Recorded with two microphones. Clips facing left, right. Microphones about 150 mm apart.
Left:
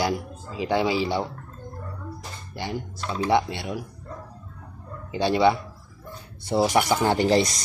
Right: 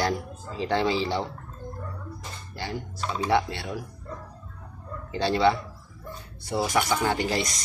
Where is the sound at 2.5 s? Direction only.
15° left (ahead or behind).